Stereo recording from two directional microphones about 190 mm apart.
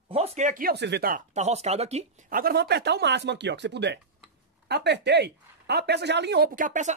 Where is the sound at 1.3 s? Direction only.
35° right (ahead or behind).